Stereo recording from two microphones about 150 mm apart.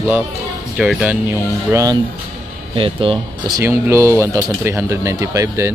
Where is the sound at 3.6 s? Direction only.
20° right (ahead or behind).